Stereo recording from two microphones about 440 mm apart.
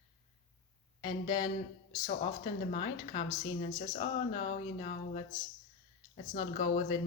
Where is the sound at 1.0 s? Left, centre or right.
Centre.